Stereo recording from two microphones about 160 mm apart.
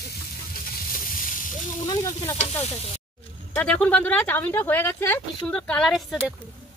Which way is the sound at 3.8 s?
10° left (ahead or behind).